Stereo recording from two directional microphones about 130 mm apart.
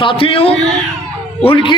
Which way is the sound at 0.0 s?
45° left (ahead or behind).